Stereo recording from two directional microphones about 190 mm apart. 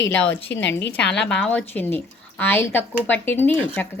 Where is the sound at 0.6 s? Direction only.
70° left (ahead or behind).